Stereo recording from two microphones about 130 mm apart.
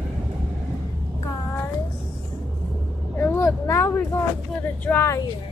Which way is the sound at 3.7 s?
25° left (ahead or behind).